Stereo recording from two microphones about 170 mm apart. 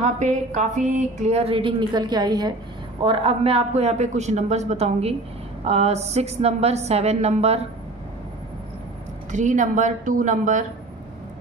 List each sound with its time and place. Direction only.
0.0 s speech: 45° right (ahead or behind)
9.3 s speech: 45° right (ahead or behind)